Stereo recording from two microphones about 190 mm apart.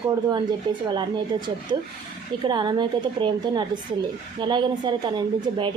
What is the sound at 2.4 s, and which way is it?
A woman's voice, 25° right (ahead or behind).